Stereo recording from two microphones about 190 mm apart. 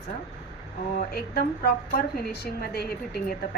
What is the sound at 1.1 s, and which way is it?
A woman's voice, 55° left (ahead or behind).